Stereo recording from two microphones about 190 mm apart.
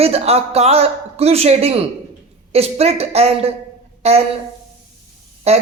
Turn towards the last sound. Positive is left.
turn(degrees=-35)  # may be behind; listen again after turning